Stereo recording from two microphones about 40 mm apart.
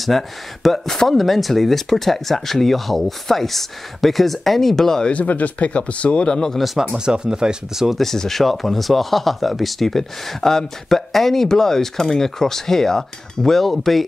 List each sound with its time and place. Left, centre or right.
0.0 s speech: centre
5.1 s speech: left
6.6 s speech: centre
6.9 s speech: centre
8.0 s speech: centre